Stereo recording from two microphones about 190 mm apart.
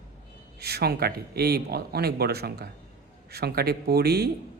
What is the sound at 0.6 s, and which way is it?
Speech, 55° right (ahead or behind).